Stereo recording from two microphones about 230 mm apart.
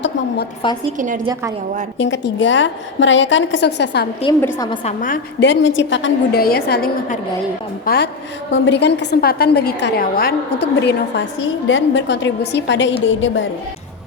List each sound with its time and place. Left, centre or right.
0.9 s a woman's voice: right
2.0 s a woman's voice: left
4.4 s a woman's voice: centre
5.0 s a woman's voice: left
5.5 s a woman's voice: left